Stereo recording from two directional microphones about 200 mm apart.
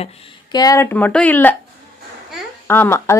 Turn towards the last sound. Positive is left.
turn(degrees=10)  # may be behind; listen again after turning